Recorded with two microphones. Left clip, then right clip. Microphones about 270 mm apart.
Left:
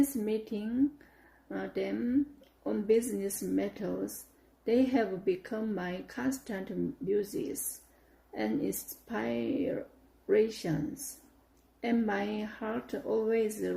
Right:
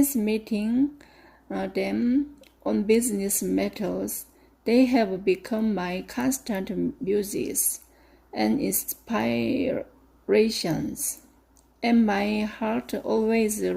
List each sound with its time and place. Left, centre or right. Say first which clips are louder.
0.3 s speech: right 7 dB; right